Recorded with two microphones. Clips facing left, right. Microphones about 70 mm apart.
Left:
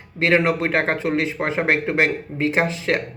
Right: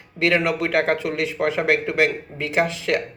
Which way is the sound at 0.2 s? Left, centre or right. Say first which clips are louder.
Left 2 dB; left.